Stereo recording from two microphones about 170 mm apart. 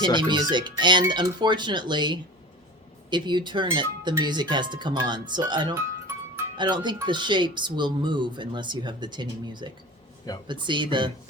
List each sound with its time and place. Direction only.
0.0 s speech: 25° right (ahead or behind)
5.7 s music: 15° right (ahead or behind)
6.6 s speech: 25° right (ahead or behind)